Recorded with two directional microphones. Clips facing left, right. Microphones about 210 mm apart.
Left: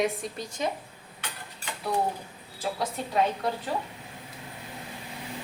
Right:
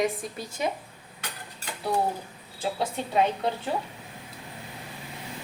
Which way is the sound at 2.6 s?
25° right (ahead or behind).